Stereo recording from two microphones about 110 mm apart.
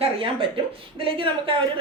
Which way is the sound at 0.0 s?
55° right (ahead or behind).